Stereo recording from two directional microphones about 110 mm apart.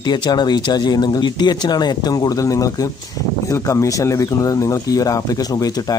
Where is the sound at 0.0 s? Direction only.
40° left (ahead or behind).